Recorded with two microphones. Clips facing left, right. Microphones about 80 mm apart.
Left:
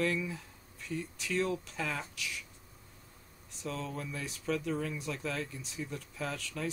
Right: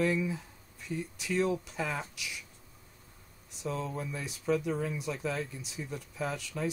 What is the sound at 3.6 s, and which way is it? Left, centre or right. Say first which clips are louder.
Speech: right 3 dB; centre.